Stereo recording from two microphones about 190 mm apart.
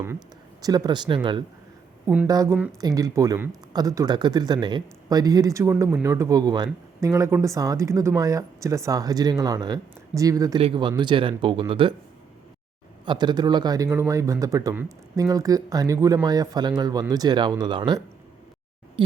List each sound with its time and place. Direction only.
0.6 s speech: 20° right (ahead or behind)
13.1 s speech: 20° right (ahead or behind)